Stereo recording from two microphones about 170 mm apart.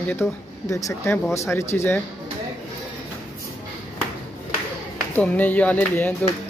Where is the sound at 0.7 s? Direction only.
20° left (ahead or behind).